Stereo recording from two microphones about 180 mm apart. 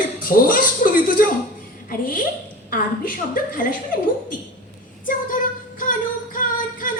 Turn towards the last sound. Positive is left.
turn(degrees=50)  # may be behind; listen again after turning